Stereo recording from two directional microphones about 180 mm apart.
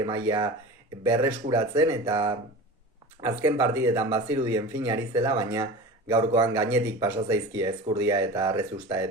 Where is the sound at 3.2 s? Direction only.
15° right (ahead or behind).